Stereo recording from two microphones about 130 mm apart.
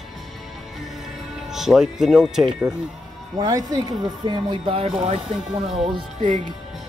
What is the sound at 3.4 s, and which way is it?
Speech, 30° right (ahead or behind).